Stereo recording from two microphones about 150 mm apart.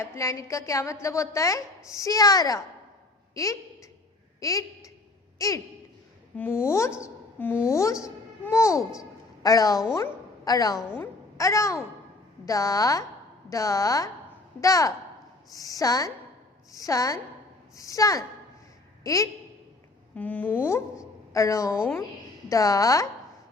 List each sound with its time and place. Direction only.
0.0 s a woman's voice: 20° left (ahead or behind)
10.8 s a woman's voice: 15° left (ahead or behind)
20.1 s a woman's voice: 10° left (ahead or behind)